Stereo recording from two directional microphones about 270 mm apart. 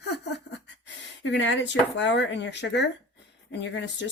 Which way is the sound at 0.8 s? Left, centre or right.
Left.